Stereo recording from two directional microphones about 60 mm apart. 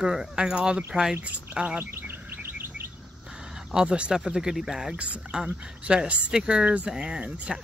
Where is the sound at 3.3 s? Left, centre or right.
Centre.